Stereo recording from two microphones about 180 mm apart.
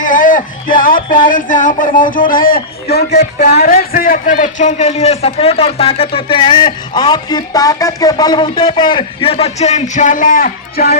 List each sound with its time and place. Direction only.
0.0 s a man's voice: 50° left (ahead or behind)